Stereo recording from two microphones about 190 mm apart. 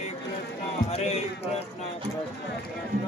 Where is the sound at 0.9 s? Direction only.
35° left (ahead or behind).